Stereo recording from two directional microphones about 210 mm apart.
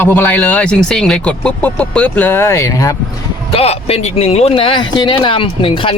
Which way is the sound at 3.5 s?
30° left (ahead or behind).